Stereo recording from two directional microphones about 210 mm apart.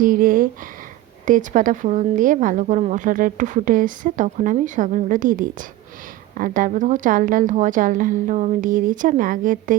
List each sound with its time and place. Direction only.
0.0 s speech: 40° right (ahead or behind)